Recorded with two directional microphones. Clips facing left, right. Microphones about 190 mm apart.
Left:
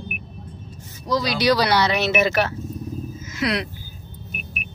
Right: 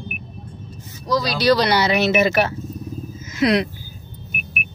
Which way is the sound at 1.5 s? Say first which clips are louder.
Right 4 dB; 5° left (ahead or behind).